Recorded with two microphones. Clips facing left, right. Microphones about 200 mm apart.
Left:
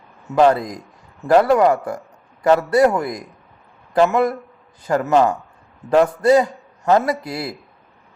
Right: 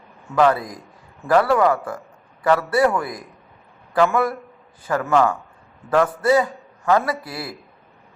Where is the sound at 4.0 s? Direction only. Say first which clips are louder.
Left 3 dB; 20° left (ahead or behind).